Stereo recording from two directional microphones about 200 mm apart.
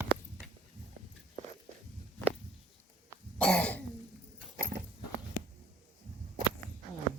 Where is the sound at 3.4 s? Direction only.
5° left (ahead or behind).